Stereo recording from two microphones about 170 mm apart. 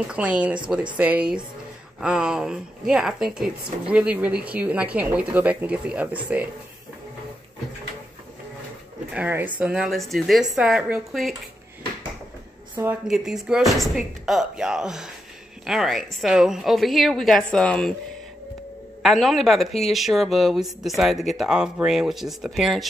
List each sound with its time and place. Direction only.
0.1 s speech: 5° right (ahead or behind)
9.1 s speech: 10° right (ahead or behind)
12.8 s speech: 15° right (ahead or behind)
13.1 s speech: 5° right (ahead or behind)
19.0 s speech: centre (ahead or behind)